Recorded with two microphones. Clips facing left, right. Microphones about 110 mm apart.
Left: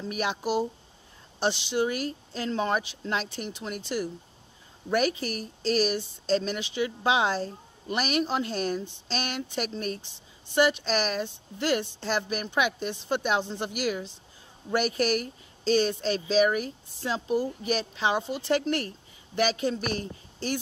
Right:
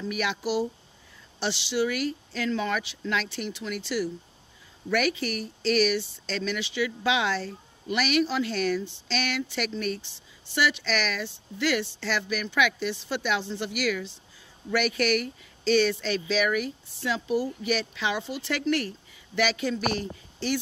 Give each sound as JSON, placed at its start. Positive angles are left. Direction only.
{"t": 0.1, "sound": "speech", "side_deg": 35}
{"t": 1.8, "sound": "speech", "side_deg": 30}
{"t": 13.7, "sound": "speech", "side_deg": 30}